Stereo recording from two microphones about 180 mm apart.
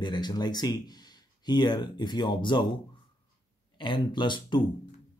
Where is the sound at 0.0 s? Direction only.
25° left (ahead or behind).